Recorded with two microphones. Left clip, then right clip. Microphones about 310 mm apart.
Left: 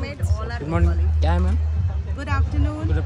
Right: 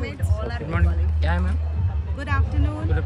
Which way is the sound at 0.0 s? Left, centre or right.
Centre.